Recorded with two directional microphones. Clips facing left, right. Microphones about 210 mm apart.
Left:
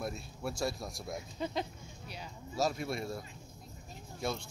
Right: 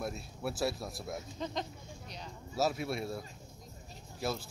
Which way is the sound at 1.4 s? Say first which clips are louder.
Left 3 dB; 5° left (ahead or behind).